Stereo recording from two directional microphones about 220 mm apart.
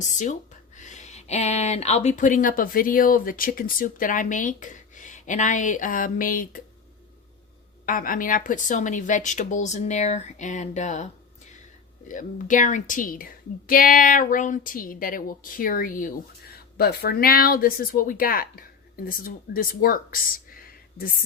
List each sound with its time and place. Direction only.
0.0 s a woman's voice: 35° left (ahead or behind)
7.9 s a woman's voice: 40° left (ahead or behind)